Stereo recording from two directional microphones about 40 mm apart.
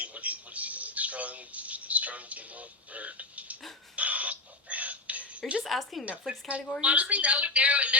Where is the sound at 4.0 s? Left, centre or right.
Right.